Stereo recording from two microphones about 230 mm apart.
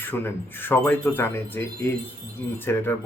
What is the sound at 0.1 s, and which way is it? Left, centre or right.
Speech, centre.